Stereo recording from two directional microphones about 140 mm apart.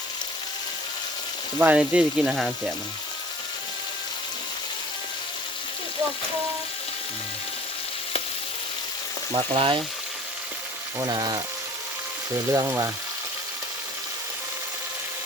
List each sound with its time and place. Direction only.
1.5 s speech: 10° right (ahead or behind)
9.3 s frying: 40° right (ahead or behind)
11.0 s speech: 30° right (ahead or behind)
12.5 s speech: 20° right (ahead or behind)